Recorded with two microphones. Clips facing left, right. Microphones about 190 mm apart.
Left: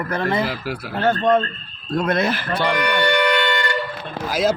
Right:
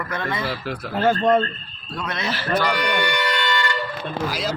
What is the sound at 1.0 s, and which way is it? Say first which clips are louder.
Speech: even; 5° right (ahead or behind).